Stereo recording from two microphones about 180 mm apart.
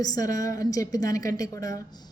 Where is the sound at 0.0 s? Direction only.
20° left (ahead or behind).